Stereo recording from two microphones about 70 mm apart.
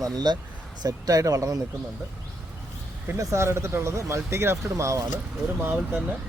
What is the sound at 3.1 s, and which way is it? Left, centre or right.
Speech, right.